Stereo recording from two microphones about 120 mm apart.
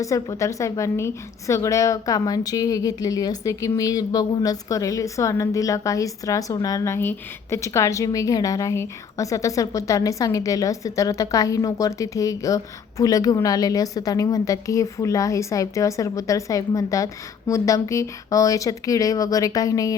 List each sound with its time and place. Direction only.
0.0 s a woman's voice: 25° left (ahead or behind)